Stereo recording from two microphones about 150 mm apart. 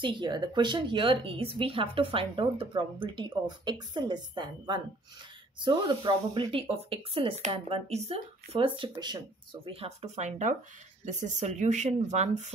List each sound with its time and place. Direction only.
0.0 s speech: 30° right (ahead or behind); by 12.5 s 50° right (ahead or behind)